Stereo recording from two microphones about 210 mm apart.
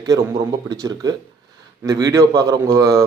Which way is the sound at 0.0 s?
15° right (ahead or behind).